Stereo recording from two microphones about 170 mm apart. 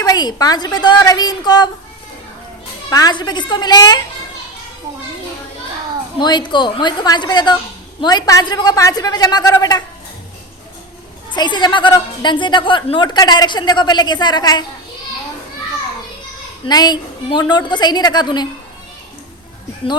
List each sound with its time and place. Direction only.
0.0 s a woman's voice: 25° left (ahead or behind)
2.9 s a woman's voice: 25° left (ahead or behind)
6.1 s a woman's voice: 25° left (ahead or behind)
11.3 s a woman's voice: 25° left (ahead or behind)
16.6 s a woman's voice: 25° left (ahead or behind)